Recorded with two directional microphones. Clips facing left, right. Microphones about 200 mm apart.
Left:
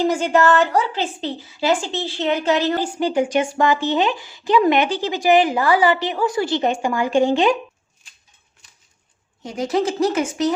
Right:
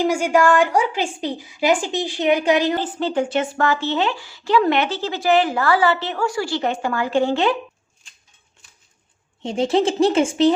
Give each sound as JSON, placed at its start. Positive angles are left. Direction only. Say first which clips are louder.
{"t": 0.0, "sound": "a woman's voice", "louder": "even", "side_deg": -10}
{"t": 2.8, "sound": "speech", "louder": "left 2 dB", "side_deg": 10}
{"t": 9.4, "sound": "a woman's voice", "louder": "right 3 dB", "side_deg": -30}